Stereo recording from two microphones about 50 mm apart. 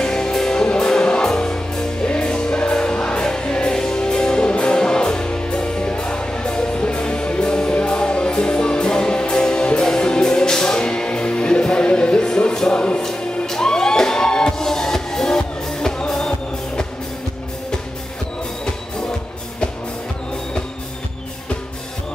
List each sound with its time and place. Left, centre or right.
0.0 s music: centre